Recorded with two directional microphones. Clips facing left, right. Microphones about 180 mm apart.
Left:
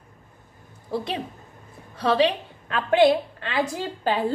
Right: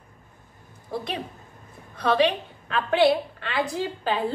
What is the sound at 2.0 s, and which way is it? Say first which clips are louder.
Speech: left 1 dB; 30° left (ahead or behind).